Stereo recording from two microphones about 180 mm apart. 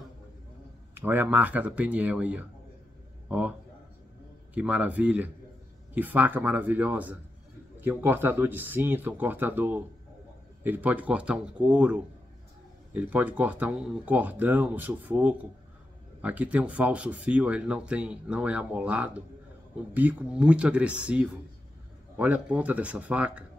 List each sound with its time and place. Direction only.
0.9 s a man's voice: 10° right (ahead or behind)
4.6 s speech: 10° right (ahead or behind)